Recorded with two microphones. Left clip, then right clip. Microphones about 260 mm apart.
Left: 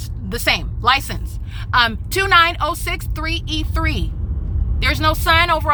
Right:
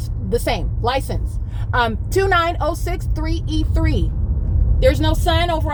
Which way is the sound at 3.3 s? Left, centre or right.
Centre.